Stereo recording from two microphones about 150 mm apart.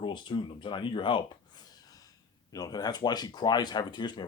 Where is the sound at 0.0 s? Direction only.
30° left (ahead or behind).